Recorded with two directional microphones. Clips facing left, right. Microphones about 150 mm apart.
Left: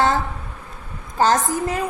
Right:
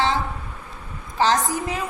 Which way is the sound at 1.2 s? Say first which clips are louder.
Left 2 dB; 45° left (ahead or behind).